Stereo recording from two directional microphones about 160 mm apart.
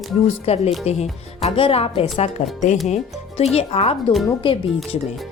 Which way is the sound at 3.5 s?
40° left (ahead or behind).